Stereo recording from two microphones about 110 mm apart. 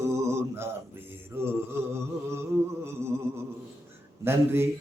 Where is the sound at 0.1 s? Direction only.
25° right (ahead or behind).